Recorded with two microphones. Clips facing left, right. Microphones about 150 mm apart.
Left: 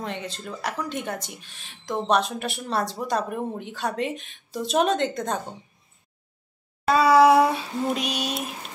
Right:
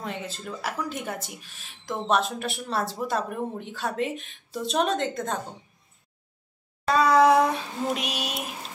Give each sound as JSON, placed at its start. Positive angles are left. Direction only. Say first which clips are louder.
{"t": 0.0, "sound": "a woman's voice", "louder": "left 2 dB", "side_deg": -5}
{"t": 6.9, "sound": "a woman's voice", "louder": "left 2 dB", "side_deg": 5}